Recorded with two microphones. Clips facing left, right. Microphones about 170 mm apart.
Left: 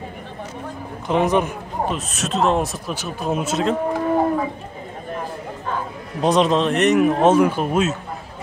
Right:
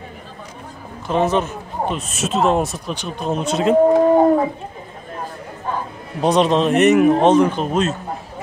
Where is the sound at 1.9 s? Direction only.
Centre (ahead or behind).